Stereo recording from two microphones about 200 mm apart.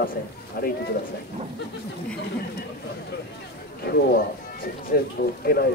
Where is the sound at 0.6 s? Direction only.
50° left (ahead or behind).